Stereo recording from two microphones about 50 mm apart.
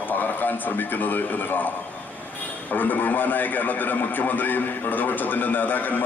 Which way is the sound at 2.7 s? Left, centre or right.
Left.